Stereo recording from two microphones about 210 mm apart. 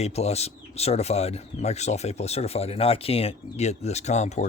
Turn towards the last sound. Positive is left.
turn(degrees=35)  # may be behind; listen again after turning